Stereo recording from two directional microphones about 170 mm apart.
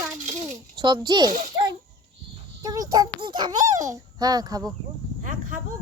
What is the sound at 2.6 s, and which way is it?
Child singing, 20° right (ahead or behind).